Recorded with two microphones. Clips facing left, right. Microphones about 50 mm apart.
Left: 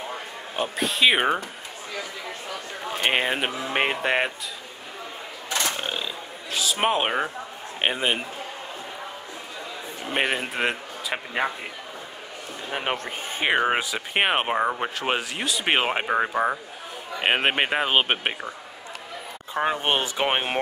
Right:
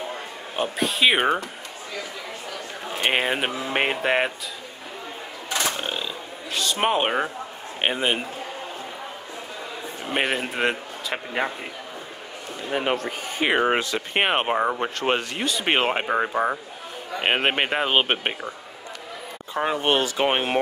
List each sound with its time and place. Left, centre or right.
0.6 s speech: centre
3.0 s speech: centre
5.7 s a sound: centre
7.8 s speech: centre
10.0 s speech: centre
13.5 s speech: centre
19.5 s speech: centre
20.2 s speech: centre